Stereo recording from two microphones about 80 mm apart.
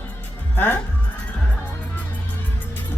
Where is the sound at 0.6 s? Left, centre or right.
Left.